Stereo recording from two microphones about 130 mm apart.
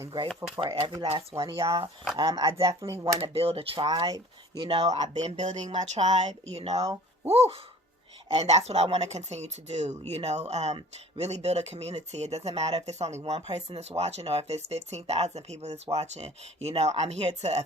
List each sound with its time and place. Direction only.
0.5 s speech: 40° right (ahead or behind)
1.0 s speech: 45° right (ahead or behind)
1.5 s speech: 25° right (ahead or behind)
3.3 s speech: 50° right (ahead or behind)
3.8 s speech: 35° right (ahead or behind)
4.6 s speech: 50° right (ahead or behind)